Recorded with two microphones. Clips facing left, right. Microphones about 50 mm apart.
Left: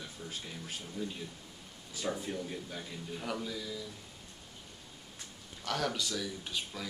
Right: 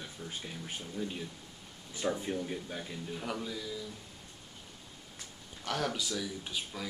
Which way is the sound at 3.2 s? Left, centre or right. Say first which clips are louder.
Left 1 dB; centre.